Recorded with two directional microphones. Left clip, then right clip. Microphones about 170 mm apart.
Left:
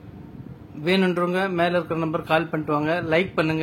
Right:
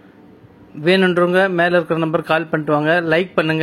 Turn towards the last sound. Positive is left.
turn(degrees=-30)  # may be behind; listen again after turning